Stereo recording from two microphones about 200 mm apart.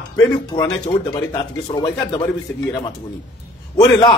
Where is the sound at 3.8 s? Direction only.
25° left (ahead or behind).